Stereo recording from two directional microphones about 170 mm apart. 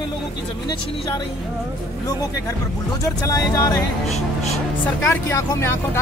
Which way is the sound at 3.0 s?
20° left (ahead or behind).